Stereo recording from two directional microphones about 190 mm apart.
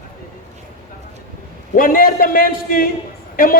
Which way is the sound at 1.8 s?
45° left (ahead or behind).